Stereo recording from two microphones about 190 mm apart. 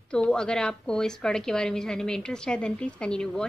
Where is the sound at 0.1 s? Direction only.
5° left (ahead or behind).